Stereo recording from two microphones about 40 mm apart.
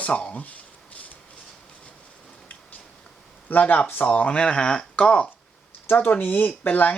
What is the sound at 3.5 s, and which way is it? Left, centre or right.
Speech, left.